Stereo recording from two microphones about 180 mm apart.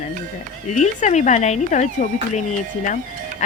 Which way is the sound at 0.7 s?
40° left (ahead or behind).